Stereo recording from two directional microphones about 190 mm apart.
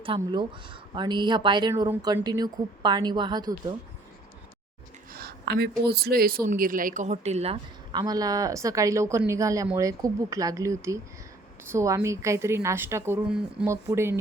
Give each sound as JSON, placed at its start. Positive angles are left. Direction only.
{"t": 0.0, "sound": "a woman's voice", "side_deg": -25}
{"t": 5.1, "sound": "a woman's voice", "side_deg": -55}